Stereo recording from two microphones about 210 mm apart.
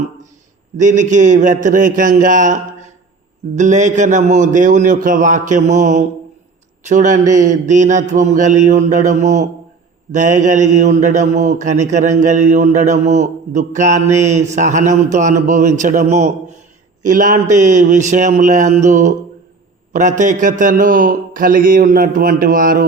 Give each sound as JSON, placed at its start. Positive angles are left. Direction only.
{"t": 0.8, "sound": "speech", "side_deg": -35}